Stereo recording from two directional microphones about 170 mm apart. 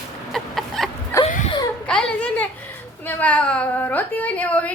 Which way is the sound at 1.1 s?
15° left (ahead or behind).